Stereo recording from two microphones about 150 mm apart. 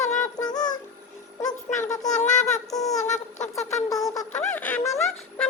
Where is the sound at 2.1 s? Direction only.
55° left (ahead or behind).